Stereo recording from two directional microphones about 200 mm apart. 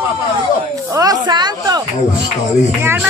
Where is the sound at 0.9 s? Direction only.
20° right (ahead or behind).